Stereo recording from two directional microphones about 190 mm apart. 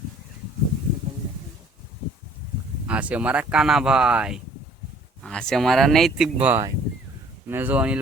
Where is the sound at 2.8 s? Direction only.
5° right (ahead or behind).